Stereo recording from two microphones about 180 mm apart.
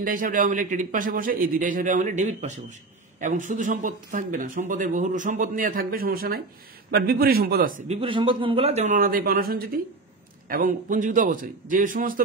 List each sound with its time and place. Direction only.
0.0 s a man's voice: 50° right (ahead or behind)
8.0 s a man's voice: 30° right (ahead or behind); by 12.2 s 50° right (ahead or behind)